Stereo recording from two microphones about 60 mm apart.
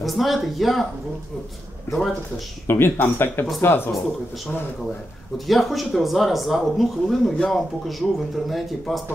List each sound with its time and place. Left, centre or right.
0.0 s speech: centre
2.6 s speech: left
5.5 s speech: centre